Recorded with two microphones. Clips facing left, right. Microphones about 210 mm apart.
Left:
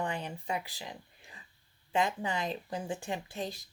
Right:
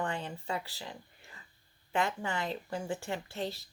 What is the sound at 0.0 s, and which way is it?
Speech, 15° left (ahead or behind).